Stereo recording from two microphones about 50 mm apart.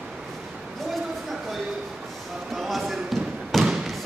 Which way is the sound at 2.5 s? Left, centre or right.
Centre.